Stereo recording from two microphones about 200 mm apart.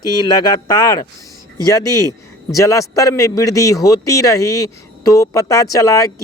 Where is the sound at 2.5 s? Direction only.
15° left (ahead or behind).